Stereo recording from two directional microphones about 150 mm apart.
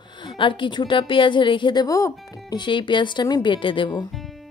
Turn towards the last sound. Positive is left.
turn(degrees=30)  # may be behind; listen again after turning